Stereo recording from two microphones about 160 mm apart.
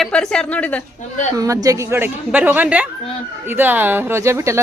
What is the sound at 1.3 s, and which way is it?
Speech, 20° right (ahead or behind).